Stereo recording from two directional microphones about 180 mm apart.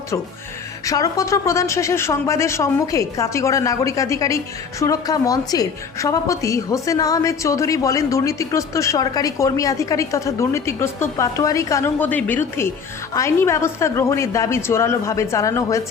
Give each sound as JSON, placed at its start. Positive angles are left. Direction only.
{"t": 0.9, "sound": "a woman's voice", "side_deg": 20}